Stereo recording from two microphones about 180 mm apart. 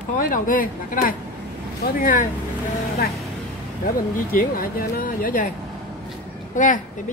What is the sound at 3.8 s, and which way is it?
Speech, 55° left (ahead or behind).